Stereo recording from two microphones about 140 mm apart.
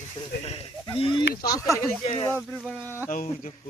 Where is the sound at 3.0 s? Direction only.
70° left (ahead or behind).